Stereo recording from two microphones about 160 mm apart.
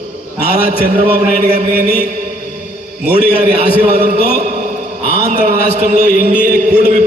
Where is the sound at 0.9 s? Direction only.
50° right (ahead or behind).